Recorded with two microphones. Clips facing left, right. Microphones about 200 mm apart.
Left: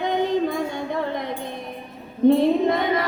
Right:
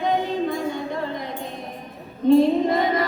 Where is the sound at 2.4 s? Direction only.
60° left (ahead or behind).